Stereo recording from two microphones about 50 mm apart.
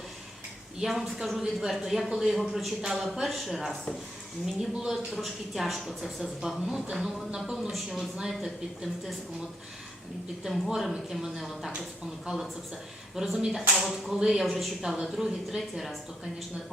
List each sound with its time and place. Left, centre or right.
0.8 s a woman's voice: centre
10.7 s a woman's voice: centre
13.1 s a woman's voice: centre
14.8 s a woman's voice: centre
15.0 s a woman's voice: centre